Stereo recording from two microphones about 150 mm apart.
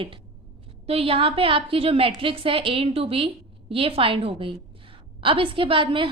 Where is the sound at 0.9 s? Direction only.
40° right (ahead or behind).